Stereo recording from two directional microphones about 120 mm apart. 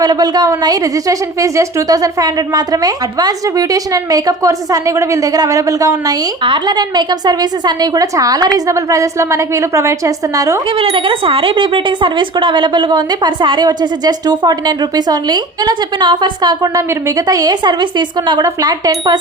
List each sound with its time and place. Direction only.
0.0 s a woman's voice: 35° right (ahead or behind)
6.4 s a woman's voice: 40° right (ahead or behind)
10.8 s a woman's voice: 50° right (ahead or behind)